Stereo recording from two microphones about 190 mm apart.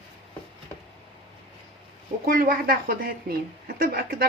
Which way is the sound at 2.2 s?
50° right (ahead or behind).